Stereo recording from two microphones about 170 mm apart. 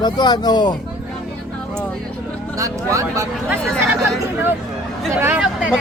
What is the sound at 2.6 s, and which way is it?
Speech, 20° right (ahead or behind).